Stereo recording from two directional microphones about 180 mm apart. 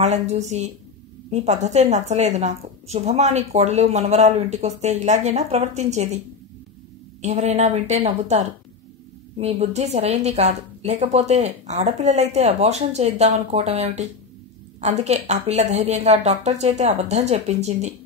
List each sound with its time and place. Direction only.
0.0 s a woman's voice: 40° right (ahead or behind)